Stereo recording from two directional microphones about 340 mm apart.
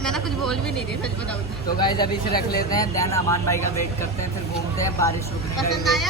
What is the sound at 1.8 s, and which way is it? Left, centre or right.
Speech, centre.